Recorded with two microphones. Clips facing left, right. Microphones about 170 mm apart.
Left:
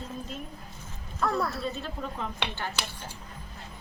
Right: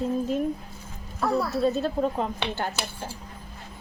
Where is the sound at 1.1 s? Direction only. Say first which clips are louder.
Right 3 dB; 10° right (ahead or behind).